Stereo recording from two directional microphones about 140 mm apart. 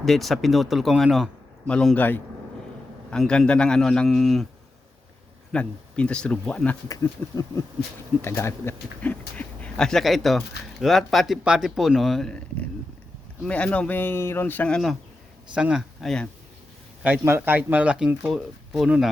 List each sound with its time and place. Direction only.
0.0 s speech: centre (ahead or behind)
5.5 s speech: 5° left (ahead or behind)
6.8 s a sound: 25° left (ahead or behind)
8.2 s speech: 20° left (ahead or behind)
15.5 s speech: 5° right (ahead or behind)
17.0 s speech: 15° right (ahead or behind)